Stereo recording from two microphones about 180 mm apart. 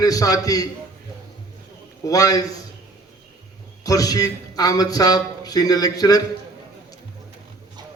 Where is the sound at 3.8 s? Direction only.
20° left (ahead or behind).